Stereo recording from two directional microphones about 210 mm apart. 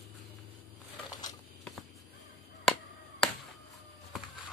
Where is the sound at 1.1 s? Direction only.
20° left (ahead or behind).